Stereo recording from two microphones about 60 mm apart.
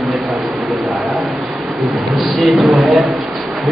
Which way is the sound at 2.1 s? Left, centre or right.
Centre.